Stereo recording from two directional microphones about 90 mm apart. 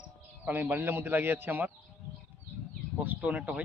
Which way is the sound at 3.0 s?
15° right (ahead or behind).